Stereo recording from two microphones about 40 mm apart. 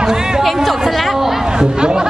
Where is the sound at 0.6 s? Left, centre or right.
Centre.